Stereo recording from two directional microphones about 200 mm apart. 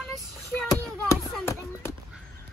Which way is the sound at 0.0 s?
Centre (ahead or behind).